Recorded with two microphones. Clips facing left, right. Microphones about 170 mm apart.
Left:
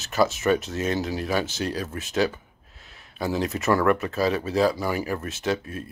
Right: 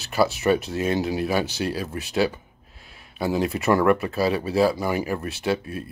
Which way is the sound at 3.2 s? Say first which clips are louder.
Right 2 dB; 10° right (ahead or behind).